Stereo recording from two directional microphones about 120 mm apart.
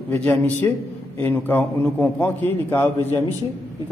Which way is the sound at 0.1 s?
15° left (ahead or behind).